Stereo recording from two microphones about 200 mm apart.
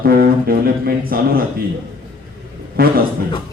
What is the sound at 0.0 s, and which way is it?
A man's voice, 50° right (ahead or behind).